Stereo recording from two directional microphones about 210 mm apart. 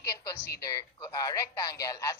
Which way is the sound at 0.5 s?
15° left (ahead or behind).